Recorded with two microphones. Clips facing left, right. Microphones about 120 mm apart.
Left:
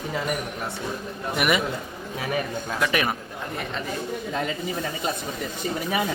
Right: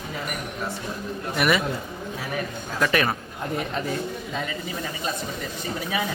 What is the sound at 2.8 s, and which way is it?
Speech, 10° left (ahead or behind).